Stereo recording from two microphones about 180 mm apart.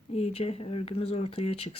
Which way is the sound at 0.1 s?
35° left (ahead or behind).